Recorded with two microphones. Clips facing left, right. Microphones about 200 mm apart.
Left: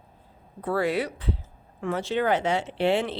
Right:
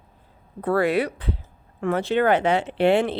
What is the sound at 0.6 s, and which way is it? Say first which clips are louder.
A woman's voice: right 4 dB; 60° right (ahead or behind).